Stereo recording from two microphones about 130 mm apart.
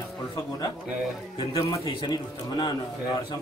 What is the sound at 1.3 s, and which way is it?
A man's voice, 35° left (ahead or behind).